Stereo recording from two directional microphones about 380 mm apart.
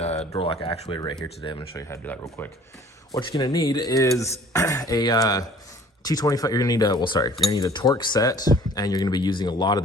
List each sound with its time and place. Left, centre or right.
0.0 s speech: centre